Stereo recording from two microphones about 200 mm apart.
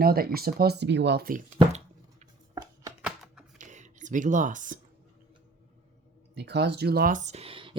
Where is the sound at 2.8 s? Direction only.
5° right (ahead or behind).